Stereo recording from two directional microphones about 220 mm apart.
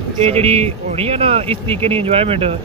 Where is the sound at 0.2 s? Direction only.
30° right (ahead or behind).